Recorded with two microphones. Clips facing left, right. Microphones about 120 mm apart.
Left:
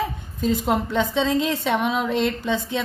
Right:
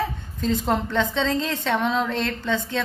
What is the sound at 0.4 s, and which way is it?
A woman's voice, 10° left (ahead or behind).